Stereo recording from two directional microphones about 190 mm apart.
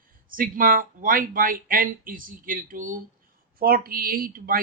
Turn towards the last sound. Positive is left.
turn(degrees=-50)  # may be behind; listen again after turning